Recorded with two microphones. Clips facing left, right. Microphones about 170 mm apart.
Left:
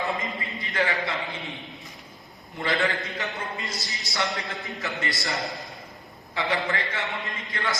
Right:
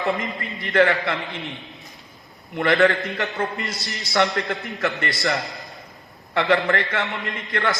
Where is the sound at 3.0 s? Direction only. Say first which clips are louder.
Right 6 dB; 70° right (ahead or behind).